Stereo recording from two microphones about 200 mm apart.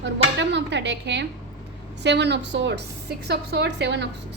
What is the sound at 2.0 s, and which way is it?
A woman's voice, 60° right (ahead or behind).